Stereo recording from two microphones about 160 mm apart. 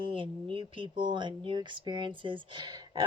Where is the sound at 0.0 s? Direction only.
35° right (ahead or behind).